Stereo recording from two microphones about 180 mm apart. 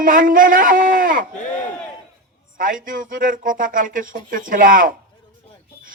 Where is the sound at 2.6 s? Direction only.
50° right (ahead or behind).